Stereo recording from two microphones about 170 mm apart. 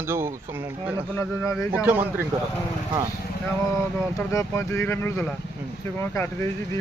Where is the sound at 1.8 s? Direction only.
10° right (ahead or behind).